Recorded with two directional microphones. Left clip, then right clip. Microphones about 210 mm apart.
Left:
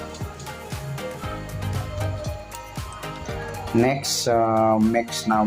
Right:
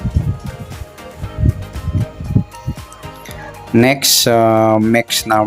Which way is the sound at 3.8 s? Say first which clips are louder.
Right 11 dB; 40° right (ahead or behind).